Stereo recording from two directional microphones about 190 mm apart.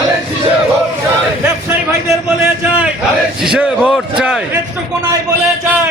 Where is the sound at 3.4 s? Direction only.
5° right (ahead or behind).